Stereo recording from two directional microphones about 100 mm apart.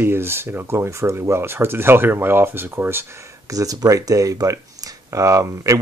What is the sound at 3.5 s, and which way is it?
Speech, 35° right (ahead or behind).